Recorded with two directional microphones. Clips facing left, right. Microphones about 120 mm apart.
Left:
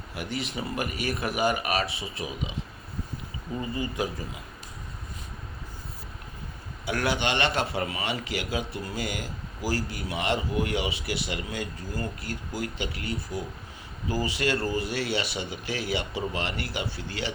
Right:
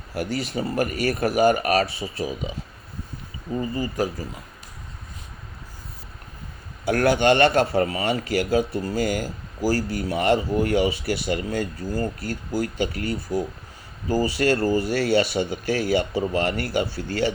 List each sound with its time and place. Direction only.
0.1 s speech: 40° right (ahead or behind)
2.0 s speech: 35° right (ahead or behind)
3.6 s speech: 40° right (ahead or behind)
6.8 s a man's voice: 45° right (ahead or behind)